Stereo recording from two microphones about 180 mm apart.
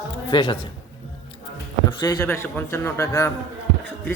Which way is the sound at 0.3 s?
25° left (ahead or behind).